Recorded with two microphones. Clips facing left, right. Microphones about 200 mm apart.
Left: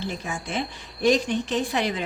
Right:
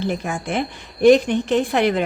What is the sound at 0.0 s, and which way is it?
A woman's voice, 60° right (ahead or behind).